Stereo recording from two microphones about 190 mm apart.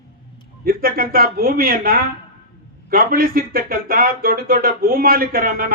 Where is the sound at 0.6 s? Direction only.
50° right (ahead or behind).